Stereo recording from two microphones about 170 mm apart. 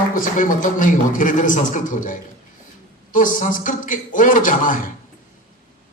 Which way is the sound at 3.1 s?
50° left (ahead or behind).